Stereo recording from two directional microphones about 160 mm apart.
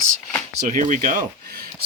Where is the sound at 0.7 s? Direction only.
55° right (ahead or behind).